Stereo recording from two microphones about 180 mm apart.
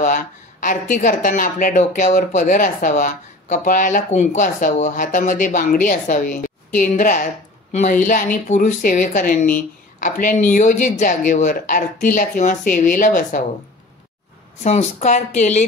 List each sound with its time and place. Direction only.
0.0 s speech: 45° left (ahead or behind)
14.6 s speech: 40° left (ahead or behind)